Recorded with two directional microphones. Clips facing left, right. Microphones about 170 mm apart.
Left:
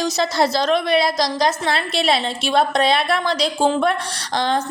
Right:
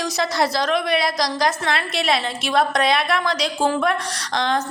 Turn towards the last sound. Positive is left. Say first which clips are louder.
# left 1 dB
turn(degrees=30)  # may be behind; listen again after turning